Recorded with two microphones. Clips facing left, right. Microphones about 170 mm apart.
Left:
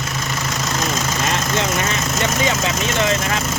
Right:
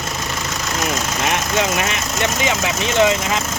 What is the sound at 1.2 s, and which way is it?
Speech, 15° right (ahead or behind).